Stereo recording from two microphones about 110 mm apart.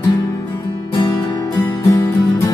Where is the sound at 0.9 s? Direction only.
45° left (ahead or behind).